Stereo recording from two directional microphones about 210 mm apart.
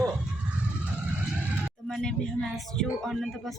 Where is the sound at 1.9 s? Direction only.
Centre (ahead or behind).